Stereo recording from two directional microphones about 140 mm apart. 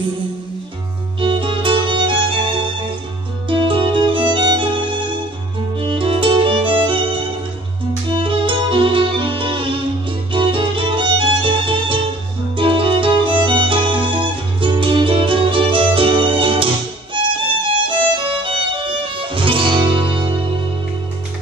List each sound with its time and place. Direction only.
1.2 s music: 35° right (ahead or behind)
5.8 s violin: 40° right (ahead or behind)
8.2 s music: 35° right (ahead or behind)
17.2 s violin: 35° right (ahead or behind)
17.8 s music: 35° right (ahead or behind)